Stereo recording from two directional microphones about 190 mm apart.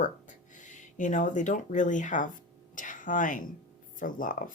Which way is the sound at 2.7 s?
45° left (ahead or behind).